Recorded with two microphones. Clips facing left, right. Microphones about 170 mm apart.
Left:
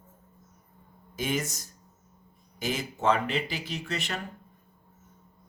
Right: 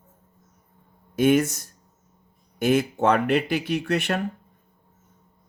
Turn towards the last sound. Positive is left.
turn(degrees=-60)  # may be behind; listen again after turning